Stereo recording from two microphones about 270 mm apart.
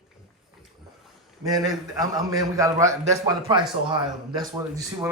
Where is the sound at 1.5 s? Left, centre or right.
Centre.